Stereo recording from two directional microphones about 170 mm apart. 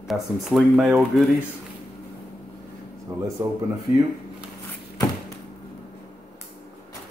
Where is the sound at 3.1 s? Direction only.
20° right (ahead or behind).